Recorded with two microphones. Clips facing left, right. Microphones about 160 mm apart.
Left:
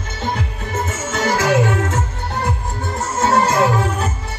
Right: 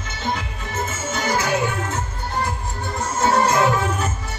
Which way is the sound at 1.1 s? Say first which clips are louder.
Left 6 dB; 90° left.